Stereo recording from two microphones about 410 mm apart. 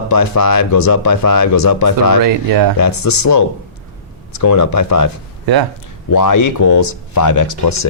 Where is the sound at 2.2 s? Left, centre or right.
Right.